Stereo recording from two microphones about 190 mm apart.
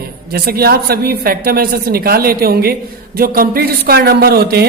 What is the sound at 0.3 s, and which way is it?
A man's voice, 55° right (ahead or behind).